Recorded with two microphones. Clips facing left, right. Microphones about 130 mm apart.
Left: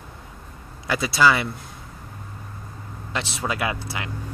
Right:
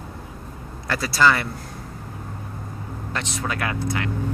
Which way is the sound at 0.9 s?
5° left (ahead or behind).